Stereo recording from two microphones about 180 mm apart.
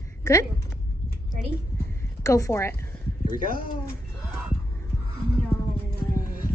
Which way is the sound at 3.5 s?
50° left (ahead or behind).